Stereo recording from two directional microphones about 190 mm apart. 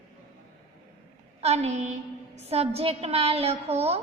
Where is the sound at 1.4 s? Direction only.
35° right (ahead or behind).